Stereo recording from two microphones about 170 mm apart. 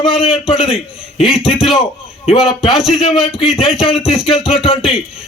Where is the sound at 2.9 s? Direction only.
35° left (ahead or behind).